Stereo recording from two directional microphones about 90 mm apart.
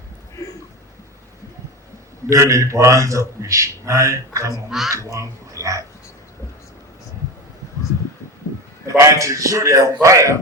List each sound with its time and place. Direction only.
2.3 s a man's voice: 35° right (ahead or behind)
8.9 s a man's voice: 35° right (ahead or behind)